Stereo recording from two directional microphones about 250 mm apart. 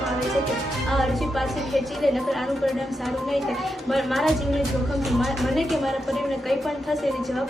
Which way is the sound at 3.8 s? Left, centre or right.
Centre.